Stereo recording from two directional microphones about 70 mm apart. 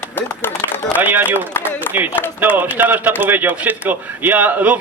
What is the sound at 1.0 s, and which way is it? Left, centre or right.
Speech, right.